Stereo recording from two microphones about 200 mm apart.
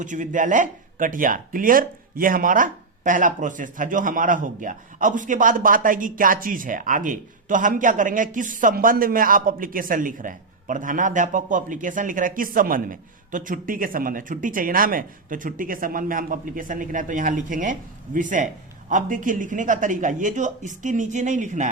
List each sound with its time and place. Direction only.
0.0 s speech: 40° right (ahead or behind)